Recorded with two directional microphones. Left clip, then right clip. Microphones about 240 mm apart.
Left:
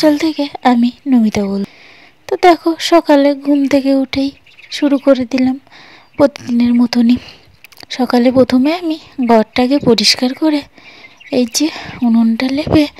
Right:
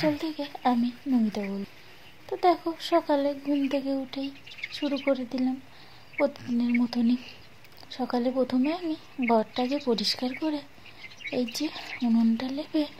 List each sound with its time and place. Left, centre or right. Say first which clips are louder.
0.0 s speech: left 16 dB; left